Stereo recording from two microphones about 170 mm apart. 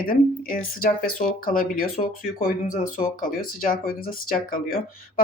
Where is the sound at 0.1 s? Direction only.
55° left (ahead or behind).